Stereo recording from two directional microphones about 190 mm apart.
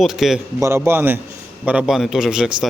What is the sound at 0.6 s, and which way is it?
A man's voice, 15° right (ahead or behind).